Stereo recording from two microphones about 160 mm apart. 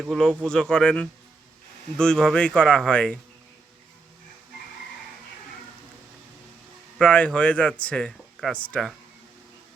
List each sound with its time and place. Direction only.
0.0 s speech: centre (ahead or behind)
7.0 s speech: 5° left (ahead or behind)